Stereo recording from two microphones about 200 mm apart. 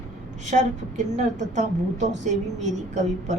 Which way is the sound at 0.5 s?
40° right (ahead or behind).